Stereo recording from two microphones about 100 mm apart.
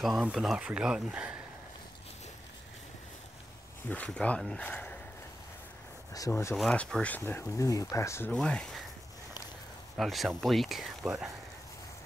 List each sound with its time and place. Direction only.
0.0 s speech: 5° right (ahead or behind)
3.9 s speech: 15° left (ahead or behind)
6.5 s speech: centre (ahead or behind)
6.8 s speech: 10° left (ahead or behind); by 8.3 s 30° left (ahead or behind)
8.3 s speech: 5° left (ahead or behind)
9.9 s speech: centre (ahead or behind)